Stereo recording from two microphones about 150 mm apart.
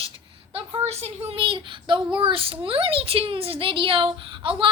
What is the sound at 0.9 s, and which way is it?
Speech, 45° right (ahead or behind).